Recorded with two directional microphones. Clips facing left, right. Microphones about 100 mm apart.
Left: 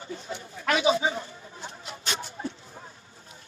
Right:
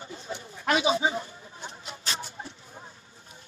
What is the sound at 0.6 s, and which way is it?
Speech, 25° right (ahead or behind).